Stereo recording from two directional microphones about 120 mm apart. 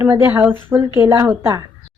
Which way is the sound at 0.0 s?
20° right (ahead or behind).